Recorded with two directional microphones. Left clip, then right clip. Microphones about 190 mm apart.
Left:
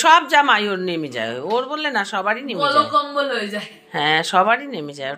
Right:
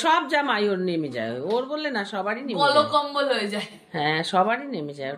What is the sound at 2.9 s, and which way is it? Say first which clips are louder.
Speech: left 3 dB; 35° right (ahead or behind).